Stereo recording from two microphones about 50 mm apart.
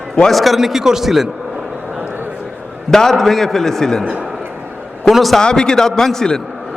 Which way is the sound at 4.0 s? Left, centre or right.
Right.